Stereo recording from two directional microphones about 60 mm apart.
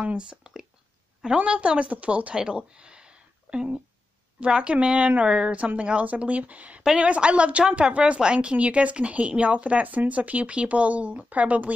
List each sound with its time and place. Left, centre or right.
0.0 s a woman's voice: centre